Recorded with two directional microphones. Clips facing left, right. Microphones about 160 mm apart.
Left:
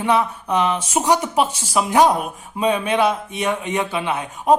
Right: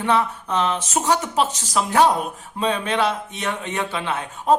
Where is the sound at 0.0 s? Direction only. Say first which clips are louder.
Left 2 dB; 10° left (ahead or behind).